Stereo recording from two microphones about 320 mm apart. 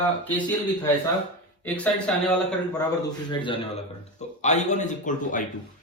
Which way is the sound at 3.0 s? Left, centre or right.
Centre.